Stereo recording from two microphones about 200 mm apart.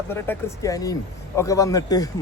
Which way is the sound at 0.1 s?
15° left (ahead or behind).